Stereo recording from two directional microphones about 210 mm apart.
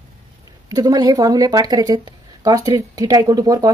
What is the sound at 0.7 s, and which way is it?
Speech, 20° right (ahead or behind).